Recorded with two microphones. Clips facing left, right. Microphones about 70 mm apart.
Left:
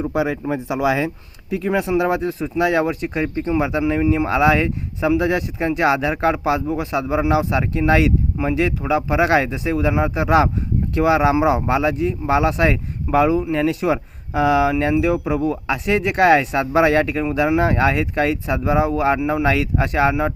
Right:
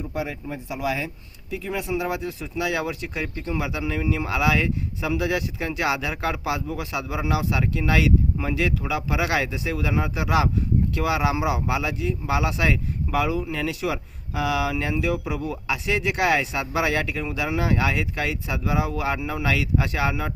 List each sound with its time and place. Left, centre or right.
0.0 s speech: left
1.5 s speech: left